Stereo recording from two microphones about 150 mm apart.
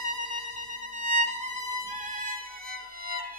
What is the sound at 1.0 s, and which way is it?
Music, 55° right (ahead or behind).